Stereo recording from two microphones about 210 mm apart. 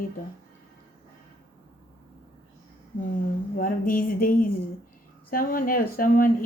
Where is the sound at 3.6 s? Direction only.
40° left (ahead or behind).